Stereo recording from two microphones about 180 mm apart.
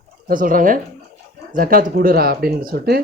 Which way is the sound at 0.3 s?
50° right (ahead or behind).